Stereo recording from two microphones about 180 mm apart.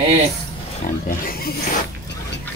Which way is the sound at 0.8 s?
50° left (ahead or behind).